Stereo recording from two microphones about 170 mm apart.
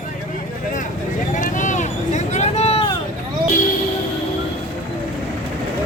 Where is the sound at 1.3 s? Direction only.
50° left (ahead or behind).